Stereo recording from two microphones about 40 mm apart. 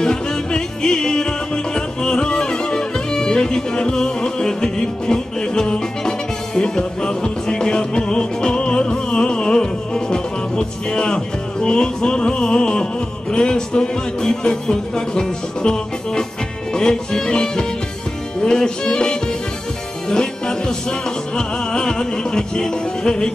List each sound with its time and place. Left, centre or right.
0.0 s music: centre